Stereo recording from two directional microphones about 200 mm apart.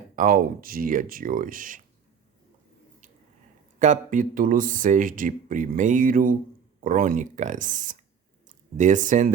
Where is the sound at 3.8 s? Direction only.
40° right (ahead or behind).